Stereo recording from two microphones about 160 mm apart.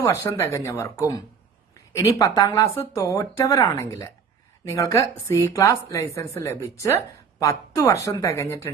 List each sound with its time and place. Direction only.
0.0 s a woman's voice: 15° left (ahead or behind)